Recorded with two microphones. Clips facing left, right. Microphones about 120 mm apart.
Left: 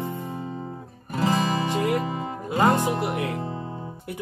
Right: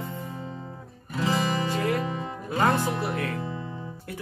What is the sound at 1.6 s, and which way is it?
Music, 20° left (ahead or behind).